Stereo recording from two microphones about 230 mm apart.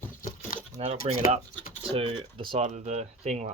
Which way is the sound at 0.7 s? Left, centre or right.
Right.